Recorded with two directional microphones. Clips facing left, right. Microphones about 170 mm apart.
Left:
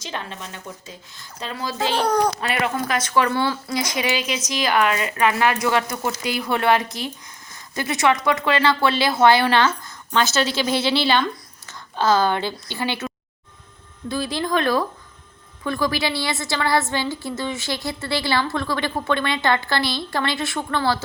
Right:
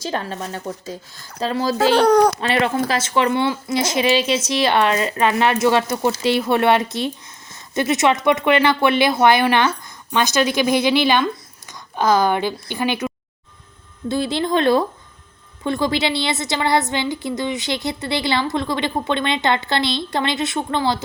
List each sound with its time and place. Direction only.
0.0 s speech: 40° right (ahead or behind)
2.0 s a child's voice: 70° right (ahead or behind)
2.6 s a woman's voice: 30° right (ahead or behind)